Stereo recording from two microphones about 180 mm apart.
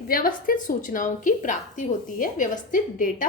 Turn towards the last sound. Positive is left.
turn(degrees=45)  # may be behind; listen again after turning